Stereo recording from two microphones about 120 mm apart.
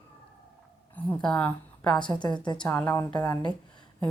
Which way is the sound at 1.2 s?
10° left (ahead or behind).